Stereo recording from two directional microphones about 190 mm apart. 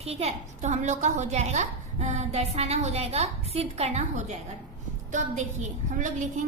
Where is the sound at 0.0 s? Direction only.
30° right (ahead or behind).